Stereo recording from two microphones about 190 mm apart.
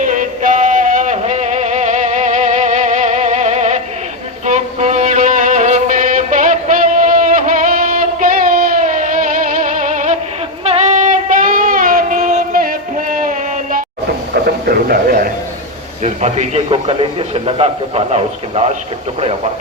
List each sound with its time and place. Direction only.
0.0 s music: 45° right (ahead or behind)
10.6 s child singing: 35° right (ahead or behind)
14.4 s a sound: 55° right (ahead or behind)
16.0 s a man's voice: 35° right (ahead or behind)